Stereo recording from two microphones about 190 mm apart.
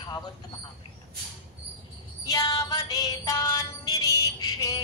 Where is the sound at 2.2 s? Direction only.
20° left (ahead or behind).